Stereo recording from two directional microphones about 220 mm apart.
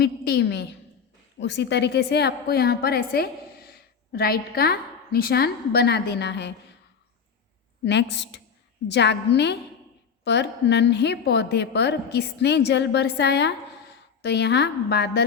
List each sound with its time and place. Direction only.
0.0 s a woman's voice: 50° left (ahead or behind)
7.9 s a woman's voice: 50° left (ahead or behind)